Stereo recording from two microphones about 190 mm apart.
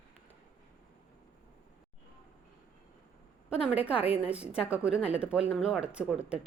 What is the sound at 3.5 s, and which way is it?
Speech, 5° right (ahead or behind).